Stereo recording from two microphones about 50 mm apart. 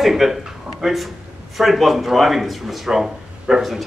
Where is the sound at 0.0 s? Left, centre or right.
Centre.